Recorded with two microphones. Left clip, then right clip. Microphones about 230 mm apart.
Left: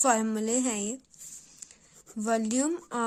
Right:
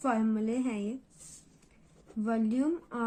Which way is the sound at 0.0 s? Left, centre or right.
Left.